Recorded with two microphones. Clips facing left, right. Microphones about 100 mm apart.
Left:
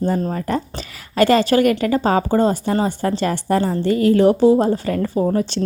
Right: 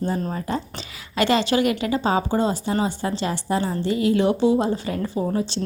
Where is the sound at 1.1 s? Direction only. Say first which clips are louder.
Left 5 dB; 45° left (ahead or behind).